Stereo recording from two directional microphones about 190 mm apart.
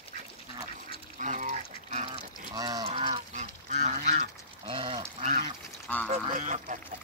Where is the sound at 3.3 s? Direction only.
40° right (ahead or behind).